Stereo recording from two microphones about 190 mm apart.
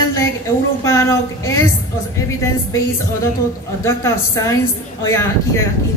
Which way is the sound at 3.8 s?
15° left (ahead or behind).